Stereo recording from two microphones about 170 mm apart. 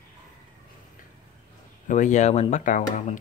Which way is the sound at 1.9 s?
45° left (ahead or behind).